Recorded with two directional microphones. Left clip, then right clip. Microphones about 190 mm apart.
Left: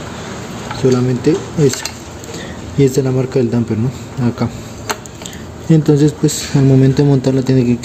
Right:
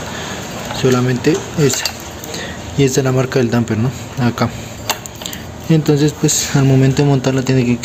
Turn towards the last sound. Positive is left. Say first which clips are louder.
# left 1 dB
turn(degrees=10)  # may be behind; listen again after turning